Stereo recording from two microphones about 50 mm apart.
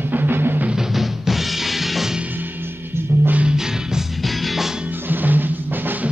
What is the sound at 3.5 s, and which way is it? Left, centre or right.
Music, centre.